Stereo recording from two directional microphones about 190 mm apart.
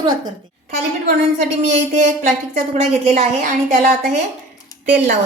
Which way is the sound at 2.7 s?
35° right (ahead or behind).